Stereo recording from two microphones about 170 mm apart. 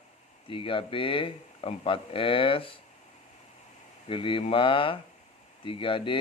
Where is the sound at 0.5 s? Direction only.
30° left (ahead or behind).